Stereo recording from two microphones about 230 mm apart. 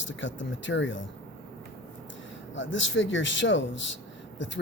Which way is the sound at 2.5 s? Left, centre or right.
Left.